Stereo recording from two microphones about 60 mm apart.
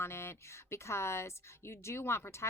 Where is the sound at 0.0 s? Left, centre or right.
Left.